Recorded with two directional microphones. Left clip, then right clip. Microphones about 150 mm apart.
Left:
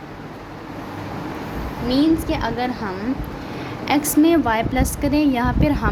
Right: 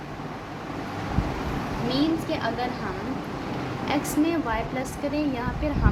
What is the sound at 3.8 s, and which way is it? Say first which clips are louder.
A woman's voice: left 8 dB; 65° left (ahead or behind).